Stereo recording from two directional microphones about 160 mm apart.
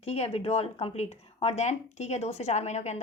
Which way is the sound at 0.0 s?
40° left (ahead or behind).